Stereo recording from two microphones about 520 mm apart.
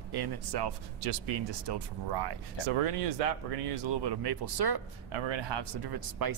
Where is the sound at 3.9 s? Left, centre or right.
Right.